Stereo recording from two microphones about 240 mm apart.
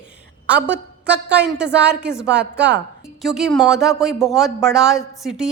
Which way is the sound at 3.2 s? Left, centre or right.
Centre.